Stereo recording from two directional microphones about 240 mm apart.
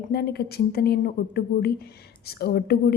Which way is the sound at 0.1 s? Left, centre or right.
Left.